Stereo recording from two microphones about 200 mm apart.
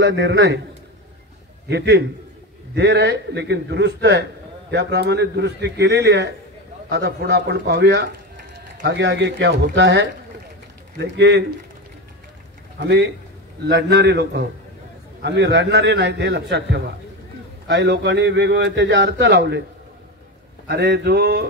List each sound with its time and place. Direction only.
0.0 s a man's voice: 60° right (ahead or behind)
1.7 s a man's voice: 60° right (ahead or behind)
12.7 s a man's voice: 60° right (ahead or behind)
20.6 s a man's voice: 60° right (ahead or behind)